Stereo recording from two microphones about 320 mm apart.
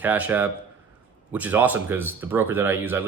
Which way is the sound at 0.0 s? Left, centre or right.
Centre.